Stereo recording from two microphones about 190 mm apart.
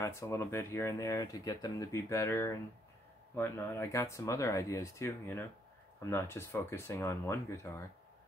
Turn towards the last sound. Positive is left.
turn(degrees=15)  # may be behind; listen again after turning